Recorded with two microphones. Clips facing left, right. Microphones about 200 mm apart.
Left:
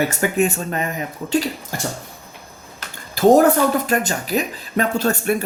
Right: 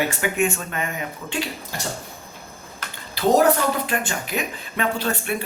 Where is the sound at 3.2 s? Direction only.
45° left (ahead or behind).